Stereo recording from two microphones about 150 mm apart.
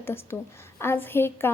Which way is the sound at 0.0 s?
15° left (ahead or behind).